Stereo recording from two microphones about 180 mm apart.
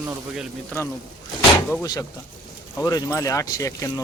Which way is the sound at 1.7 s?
20° left (ahead or behind).